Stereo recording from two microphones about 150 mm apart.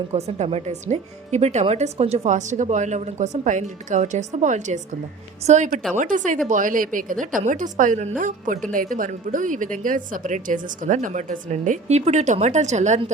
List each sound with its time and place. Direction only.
0.1 s a woman's voice: 45° right (ahead or behind)